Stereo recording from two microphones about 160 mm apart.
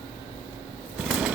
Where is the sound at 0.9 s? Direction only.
5° right (ahead or behind).